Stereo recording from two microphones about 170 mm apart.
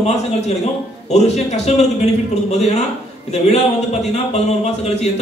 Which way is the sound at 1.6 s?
40° left (ahead or behind).